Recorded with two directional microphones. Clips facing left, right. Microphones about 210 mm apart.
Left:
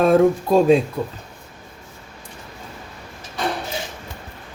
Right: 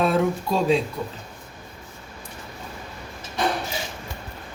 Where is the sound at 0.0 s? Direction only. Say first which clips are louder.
Left 7 dB; 50° left (ahead or behind).